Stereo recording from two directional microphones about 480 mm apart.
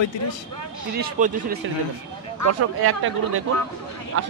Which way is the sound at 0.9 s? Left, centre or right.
Centre.